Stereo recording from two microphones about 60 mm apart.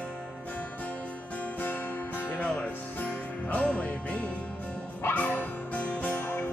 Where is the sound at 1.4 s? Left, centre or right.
Left.